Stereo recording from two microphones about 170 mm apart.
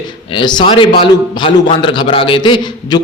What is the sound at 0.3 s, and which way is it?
A man's voice, 30° left (ahead or behind).